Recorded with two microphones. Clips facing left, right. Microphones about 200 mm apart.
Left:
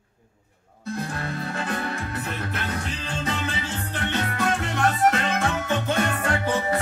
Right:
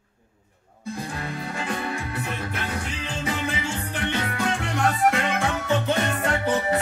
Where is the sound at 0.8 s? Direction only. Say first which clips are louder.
Left 2 dB; 10° right (ahead or behind).